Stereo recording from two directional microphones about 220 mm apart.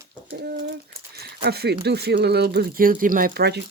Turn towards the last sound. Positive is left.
turn(degrees=-50)  # may be behind; listen again after turning